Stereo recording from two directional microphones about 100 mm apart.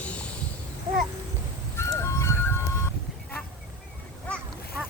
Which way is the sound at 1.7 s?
25° left (ahead or behind).